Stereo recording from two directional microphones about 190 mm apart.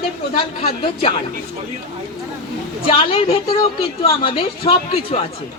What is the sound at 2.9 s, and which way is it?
Speech, 30° left (ahead or behind).